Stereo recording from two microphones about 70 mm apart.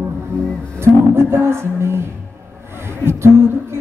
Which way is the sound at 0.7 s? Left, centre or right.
Right.